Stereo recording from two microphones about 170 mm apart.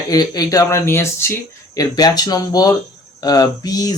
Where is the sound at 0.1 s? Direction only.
25° left (ahead or behind).